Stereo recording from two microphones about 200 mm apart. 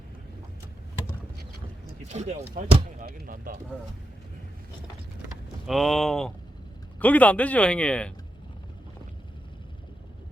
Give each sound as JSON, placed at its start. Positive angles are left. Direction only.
{"t": 2.0, "sound": "speech", "side_deg": -35}
{"t": 3.1, "sound": "speech", "side_deg": -45}
{"t": 5.6, "sound": "speech", "side_deg": 0}